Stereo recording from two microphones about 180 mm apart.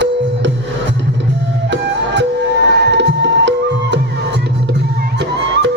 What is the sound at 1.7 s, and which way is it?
Music, 80° right.